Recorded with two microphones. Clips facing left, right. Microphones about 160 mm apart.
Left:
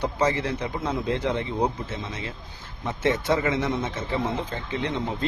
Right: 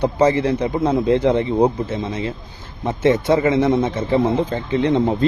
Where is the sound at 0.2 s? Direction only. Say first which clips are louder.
Right 9 dB; 30° right (ahead or behind).